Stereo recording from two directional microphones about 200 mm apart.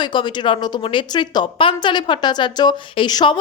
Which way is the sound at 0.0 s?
25° left (ahead or behind).